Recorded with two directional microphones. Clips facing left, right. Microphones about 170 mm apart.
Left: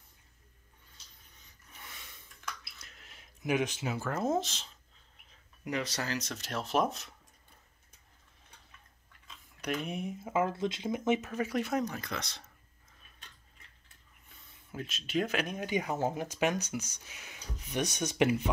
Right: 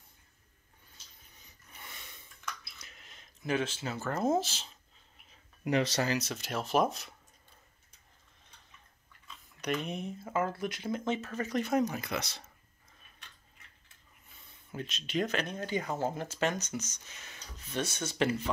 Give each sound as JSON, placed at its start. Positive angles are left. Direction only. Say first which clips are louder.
{"t": 1.7, "sound": "a sound", "louder": "right 1 dB", "side_deg": 0}
{"t": 4.0, "sound": "speech", "louder": "right 2 dB", "side_deg": 0}
{"t": 5.8, "sound": "speech", "louder": "right 6 dB", "side_deg": -20}
{"t": 6.1, "sound": "speech", "louder": "right 2 dB", "side_deg": -5}
{"t": 9.6, "sound": "speech", "louder": "right 1 dB", "side_deg": 5}
{"t": 10.1, "sound": "speech", "louder": "left 2 dB", "side_deg": 20}
{"t": 14.7, "sound": "speech", "louder": "left 1 dB", "side_deg": 5}